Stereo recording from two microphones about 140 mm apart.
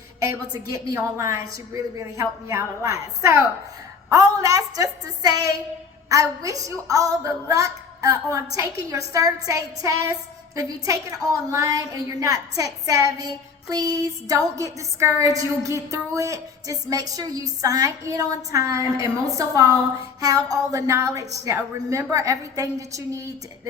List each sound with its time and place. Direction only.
0.5 s a woman's voice: 25° right (ahead or behind)